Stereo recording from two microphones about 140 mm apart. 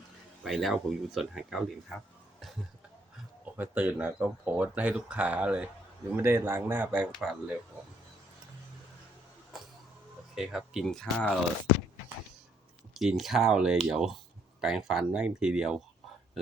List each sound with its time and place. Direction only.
0.4 s speech: centre (ahead or behind)
3.6 s speech: 10° right (ahead or behind)
10.3 s speech: 5° right (ahead or behind)
12.9 s speech: centre (ahead or behind)